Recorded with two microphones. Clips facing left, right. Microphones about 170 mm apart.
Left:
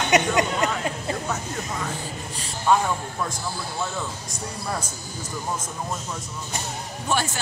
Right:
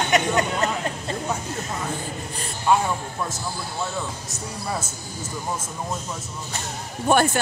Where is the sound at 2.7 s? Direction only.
5° right (ahead or behind).